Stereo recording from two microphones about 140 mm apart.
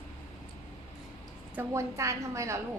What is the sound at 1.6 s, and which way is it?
A woman's voice, 20° right (ahead or behind).